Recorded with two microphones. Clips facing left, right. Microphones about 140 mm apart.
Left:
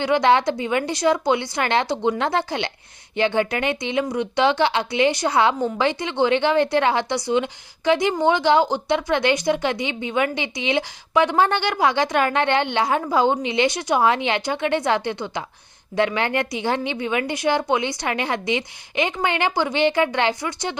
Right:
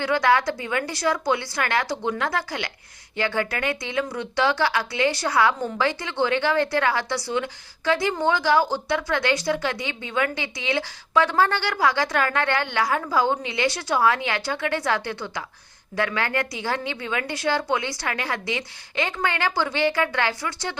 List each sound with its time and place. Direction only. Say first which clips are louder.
0.0 s a woman's voice: left 3 dB; 20° left (ahead or behind)